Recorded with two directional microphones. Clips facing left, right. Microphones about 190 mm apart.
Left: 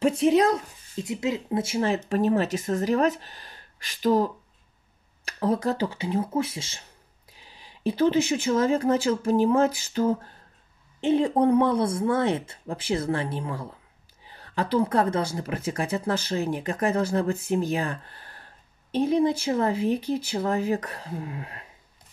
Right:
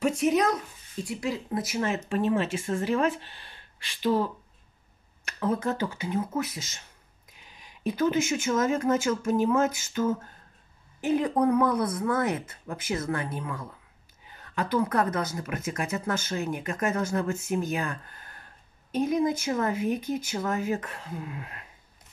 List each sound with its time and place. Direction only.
0.0 s speech: 30° left (ahead or behind)